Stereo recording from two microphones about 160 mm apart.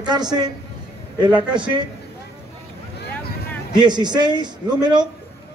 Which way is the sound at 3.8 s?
25° right (ahead or behind).